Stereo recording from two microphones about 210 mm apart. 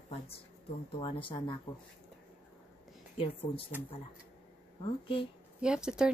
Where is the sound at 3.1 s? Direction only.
25° left (ahead or behind).